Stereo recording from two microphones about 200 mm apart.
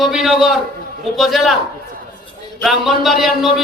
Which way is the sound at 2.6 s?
Centre (ahead or behind).